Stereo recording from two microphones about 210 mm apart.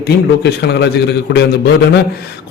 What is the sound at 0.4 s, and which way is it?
A man's voice, 55° left (ahead or behind).